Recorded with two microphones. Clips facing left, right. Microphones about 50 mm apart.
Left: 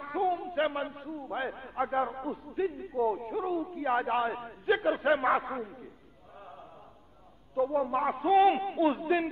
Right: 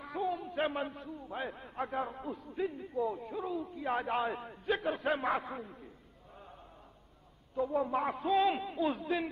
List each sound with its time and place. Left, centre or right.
0.0 s a man's voice: centre
4.0 s a man's voice: centre
4.9 s a man's voice: left
7.5 s a man's voice: centre
8.4 s a man's voice: centre